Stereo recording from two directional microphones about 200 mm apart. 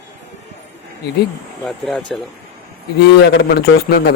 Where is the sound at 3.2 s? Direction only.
60° left (ahead or behind).